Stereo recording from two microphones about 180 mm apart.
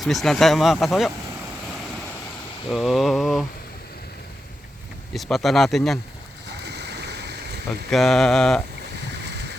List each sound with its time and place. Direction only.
0.0 s speech: centre (ahead or behind)
2.6 s speech: centre (ahead or behind)
5.1 s speech: centre (ahead or behind)
6.5 s stream: 70° right (ahead or behind)
7.9 s speech: centre (ahead or behind)
9.1 s a sound: 70° right (ahead or behind)